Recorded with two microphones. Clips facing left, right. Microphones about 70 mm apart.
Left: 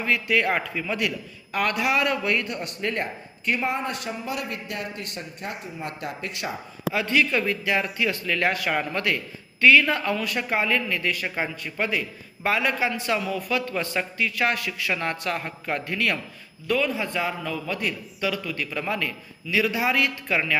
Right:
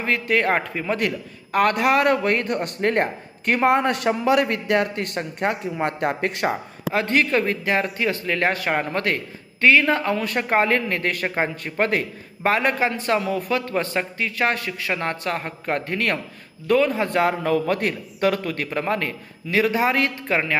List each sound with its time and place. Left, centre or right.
0.0 s a man's voice: right
10.2 s a man's voice: right